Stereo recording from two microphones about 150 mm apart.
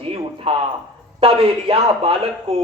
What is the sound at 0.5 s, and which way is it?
A man's voice, 40° right (ahead or behind).